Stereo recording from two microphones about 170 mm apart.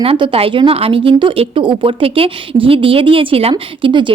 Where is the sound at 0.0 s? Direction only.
35° right (ahead or behind).